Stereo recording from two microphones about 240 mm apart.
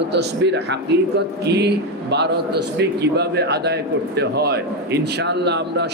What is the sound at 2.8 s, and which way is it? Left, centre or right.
Speech, right.